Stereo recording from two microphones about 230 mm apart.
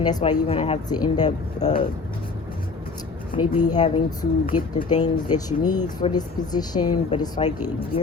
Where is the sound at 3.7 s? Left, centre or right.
Left.